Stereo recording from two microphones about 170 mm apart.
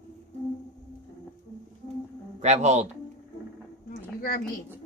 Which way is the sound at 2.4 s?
40° right (ahead or behind).